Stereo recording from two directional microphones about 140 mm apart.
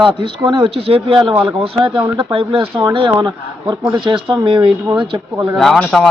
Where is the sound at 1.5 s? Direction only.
40° right (ahead or behind).